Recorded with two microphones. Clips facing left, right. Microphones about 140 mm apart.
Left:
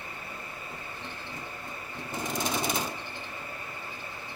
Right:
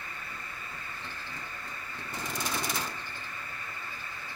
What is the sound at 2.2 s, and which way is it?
Lawn mower, 20° left (ahead or behind).